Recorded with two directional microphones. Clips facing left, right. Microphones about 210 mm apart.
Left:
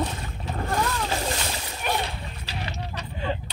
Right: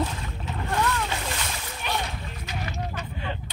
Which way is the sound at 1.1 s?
35° left (ahead or behind).